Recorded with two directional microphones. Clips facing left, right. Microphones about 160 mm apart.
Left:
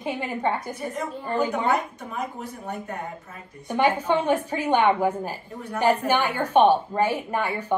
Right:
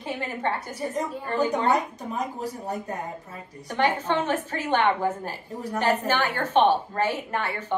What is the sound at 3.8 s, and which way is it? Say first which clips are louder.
A woman's voice: left 2 dB; 10° left (ahead or behind).